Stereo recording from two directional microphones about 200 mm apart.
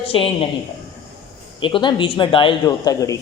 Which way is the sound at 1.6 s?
25° left (ahead or behind).